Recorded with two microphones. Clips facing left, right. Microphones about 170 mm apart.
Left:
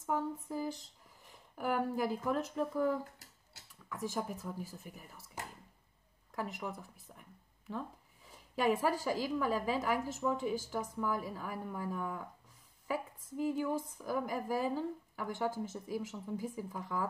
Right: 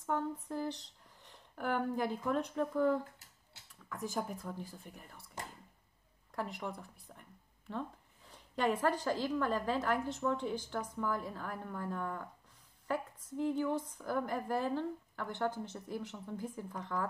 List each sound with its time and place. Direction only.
0.0 s a woman's voice: 5° left (ahead or behind)